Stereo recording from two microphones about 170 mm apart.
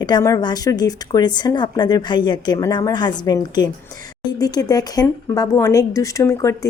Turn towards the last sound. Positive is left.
turn(degrees=15)  # may be behind; listen again after turning